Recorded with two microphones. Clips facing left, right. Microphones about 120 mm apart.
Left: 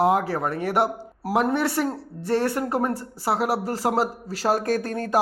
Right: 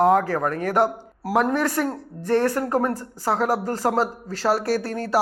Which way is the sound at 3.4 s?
40° right (ahead or behind).